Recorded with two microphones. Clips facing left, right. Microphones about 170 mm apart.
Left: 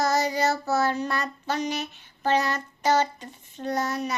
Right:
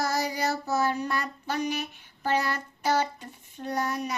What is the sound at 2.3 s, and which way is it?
Child singing, 90° left.